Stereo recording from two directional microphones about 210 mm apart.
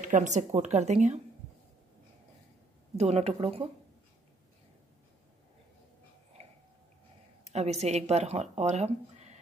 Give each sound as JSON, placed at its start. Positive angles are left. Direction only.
{"t": 0.0, "sound": "a woman's voice", "side_deg": -35}
{"t": 3.0, "sound": "speech", "side_deg": -30}
{"t": 7.4, "sound": "speech", "side_deg": -30}